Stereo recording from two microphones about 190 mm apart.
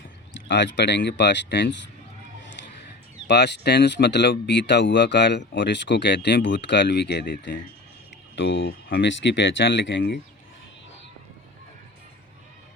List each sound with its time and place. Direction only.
0.4 s speech: 70° left (ahead or behind)
3.2 s speech: 65° left (ahead or behind)